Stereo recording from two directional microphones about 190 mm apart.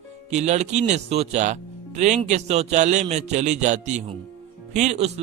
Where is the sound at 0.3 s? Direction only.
35° right (ahead or behind).